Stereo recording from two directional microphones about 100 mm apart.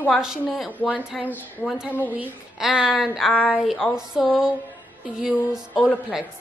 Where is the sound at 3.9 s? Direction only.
5° right (ahead or behind).